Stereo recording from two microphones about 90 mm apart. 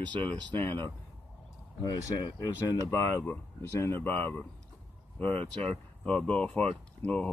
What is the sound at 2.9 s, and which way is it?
Speech, 30° left (ahead or behind).